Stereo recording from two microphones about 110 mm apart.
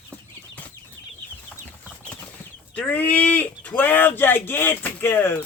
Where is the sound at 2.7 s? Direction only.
15° left (ahead or behind).